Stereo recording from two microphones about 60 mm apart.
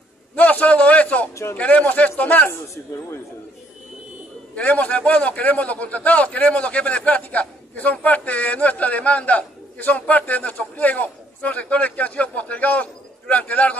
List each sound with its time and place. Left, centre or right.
0.4 s a sound: left
1.3 s speech: left
1.6 s a man's voice: left
2.7 s a man's voice: left
4.6 s a man's voice: left